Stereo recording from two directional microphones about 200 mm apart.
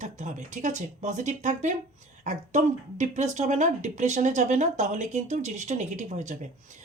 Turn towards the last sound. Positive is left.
turn(degrees=-40)  # may be behind; listen again after turning